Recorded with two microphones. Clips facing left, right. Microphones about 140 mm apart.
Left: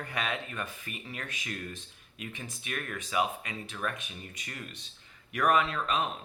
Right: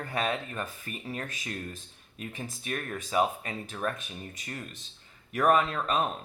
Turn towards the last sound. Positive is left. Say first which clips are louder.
# right 2 dB
turn(degrees=-40)  # may be behind; listen again after turning